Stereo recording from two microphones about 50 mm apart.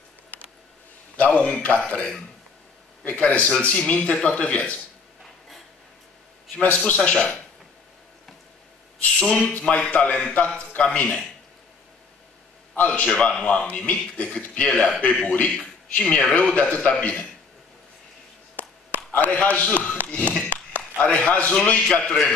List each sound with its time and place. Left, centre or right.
1.1 s a man's voice: left
6.5 s a man's voice: left
9.0 s a man's voice: left
12.7 s a man's voice: left
19.1 s a man's voice: left
21.9 s speech: centre